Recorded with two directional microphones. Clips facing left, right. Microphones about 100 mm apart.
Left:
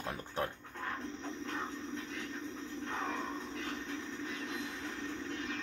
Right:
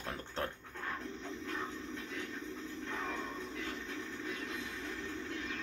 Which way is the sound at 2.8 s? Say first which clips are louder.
Left 3 dB; 30° left (ahead or behind).